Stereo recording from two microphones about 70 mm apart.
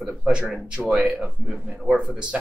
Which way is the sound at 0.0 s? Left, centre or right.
Centre.